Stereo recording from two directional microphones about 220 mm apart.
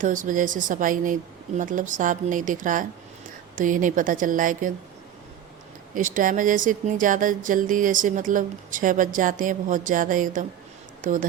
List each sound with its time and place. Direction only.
0.0 s speech: 35° right (ahead or behind)
5.9 s speech: 35° right (ahead or behind)